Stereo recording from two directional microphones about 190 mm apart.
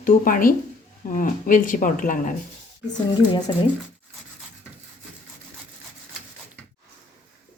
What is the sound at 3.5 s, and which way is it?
Speech, 25° left (ahead or behind).